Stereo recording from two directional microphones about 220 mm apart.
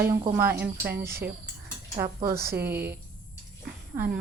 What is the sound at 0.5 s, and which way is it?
Speech, 45° right (ahead or behind).